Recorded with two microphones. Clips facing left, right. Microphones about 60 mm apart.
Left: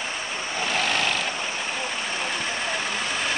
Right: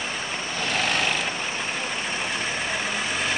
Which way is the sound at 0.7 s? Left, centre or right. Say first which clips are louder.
Even; centre.